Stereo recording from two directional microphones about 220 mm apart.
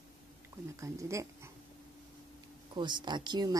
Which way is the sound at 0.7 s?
15° right (ahead or behind).